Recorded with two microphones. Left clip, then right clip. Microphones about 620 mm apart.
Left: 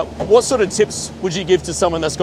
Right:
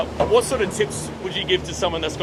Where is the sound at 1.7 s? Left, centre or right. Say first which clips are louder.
Left 6 dB; left.